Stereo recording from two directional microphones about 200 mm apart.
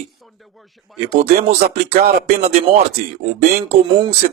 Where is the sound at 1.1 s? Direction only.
35° right (ahead or behind).